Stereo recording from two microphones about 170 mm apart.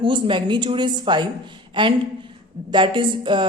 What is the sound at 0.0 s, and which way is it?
A woman's voice, 30° right (ahead or behind).